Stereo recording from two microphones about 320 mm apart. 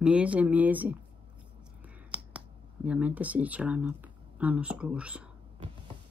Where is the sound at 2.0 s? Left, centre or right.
Centre.